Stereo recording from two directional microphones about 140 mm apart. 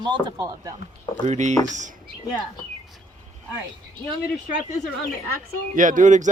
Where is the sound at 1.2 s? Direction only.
60° right (ahead or behind).